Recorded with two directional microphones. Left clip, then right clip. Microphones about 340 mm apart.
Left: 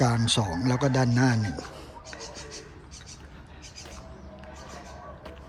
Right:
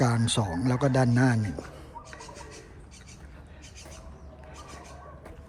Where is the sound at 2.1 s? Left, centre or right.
Centre.